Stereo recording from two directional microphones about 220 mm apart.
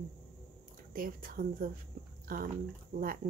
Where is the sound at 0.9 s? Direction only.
40° right (ahead or behind).